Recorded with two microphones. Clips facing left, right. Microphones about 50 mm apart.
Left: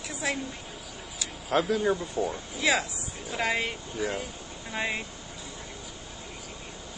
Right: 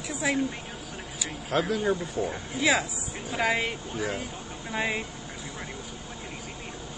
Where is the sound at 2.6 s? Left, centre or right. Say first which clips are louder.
Right 2 dB; centre.